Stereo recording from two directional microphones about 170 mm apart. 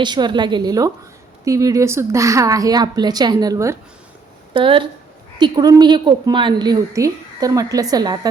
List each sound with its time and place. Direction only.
0.0 s a woman's voice: 25° right (ahead or behind)
4.5 s a woman's voice: 30° right (ahead or behind)